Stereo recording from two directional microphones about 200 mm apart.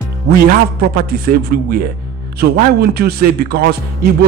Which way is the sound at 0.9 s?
50° right (ahead or behind).